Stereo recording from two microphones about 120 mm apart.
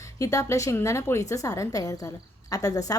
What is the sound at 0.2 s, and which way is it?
A woman's voice, 25° left (ahead or behind).